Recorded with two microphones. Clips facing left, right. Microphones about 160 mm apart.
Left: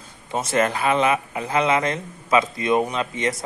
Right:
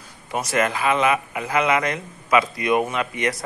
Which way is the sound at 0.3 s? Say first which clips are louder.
Left 1 dB; 25° left (ahead or behind).